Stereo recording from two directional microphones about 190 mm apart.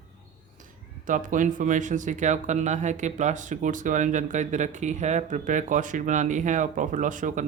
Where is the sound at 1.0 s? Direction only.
45° right (ahead or behind).